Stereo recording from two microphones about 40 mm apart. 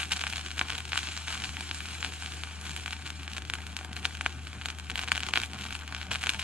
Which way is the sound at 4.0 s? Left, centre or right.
Right.